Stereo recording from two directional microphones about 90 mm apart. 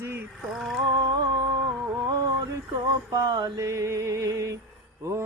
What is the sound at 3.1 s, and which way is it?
Mantra, 45° right (ahead or behind).